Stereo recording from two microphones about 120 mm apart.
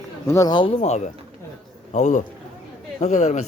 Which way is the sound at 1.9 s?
90° left.